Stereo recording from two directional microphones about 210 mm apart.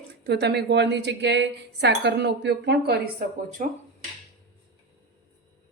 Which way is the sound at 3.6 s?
35° right (ahead or behind).